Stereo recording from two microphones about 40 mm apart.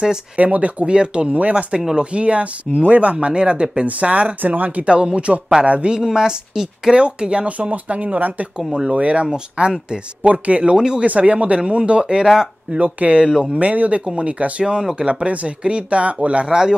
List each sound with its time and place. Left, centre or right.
0.4 s speech: right
1.7 s speech: centre
2.0 s speech: right
4.4 s speech: right
5.9 s speech: centre
7.5 s speech: right; by 11.1 s centre
11.1 s speech: right
12.7 s speech: right
13.2 s speech: right
13.6 s speech: right
14.6 s speech: centre
15.2 s speech: right